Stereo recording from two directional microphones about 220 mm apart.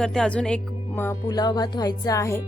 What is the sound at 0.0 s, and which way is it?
Speech, 5° left (ahead or behind).